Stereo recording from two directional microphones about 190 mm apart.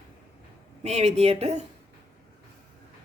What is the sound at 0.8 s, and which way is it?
Speech, 35° right (ahead or behind).